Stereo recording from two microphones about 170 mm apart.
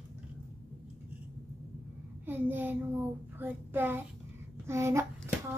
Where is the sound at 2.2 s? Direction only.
10° right (ahead or behind).